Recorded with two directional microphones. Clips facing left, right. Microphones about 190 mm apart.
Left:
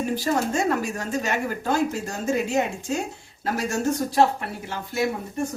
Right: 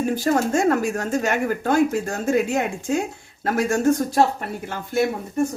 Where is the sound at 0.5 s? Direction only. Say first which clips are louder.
Right 5 dB; 50° right (ahead or behind).